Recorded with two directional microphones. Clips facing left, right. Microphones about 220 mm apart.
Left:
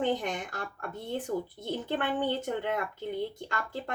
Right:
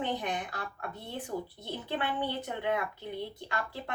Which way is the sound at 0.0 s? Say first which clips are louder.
Left 4 dB; 45° left (ahead or behind).